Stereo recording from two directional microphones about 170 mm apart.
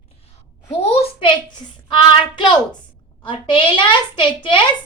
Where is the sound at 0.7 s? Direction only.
35° left (ahead or behind).